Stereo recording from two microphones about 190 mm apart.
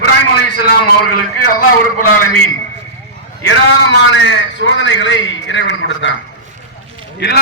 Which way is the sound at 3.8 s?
75° left (ahead or behind).